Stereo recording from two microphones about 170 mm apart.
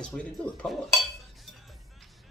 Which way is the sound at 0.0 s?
5° left (ahead or behind).